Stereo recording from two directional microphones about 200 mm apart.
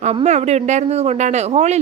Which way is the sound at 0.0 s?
35° right (ahead or behind).